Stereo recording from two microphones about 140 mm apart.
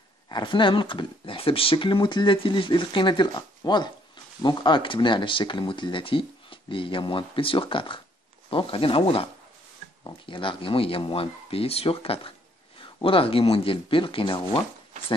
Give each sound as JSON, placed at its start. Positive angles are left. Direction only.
{"t": 0.3, "sound": "speech", "side_deg": 35}